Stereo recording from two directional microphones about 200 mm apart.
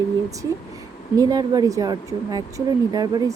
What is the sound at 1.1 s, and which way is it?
Speech, 20° right (ahead or behind).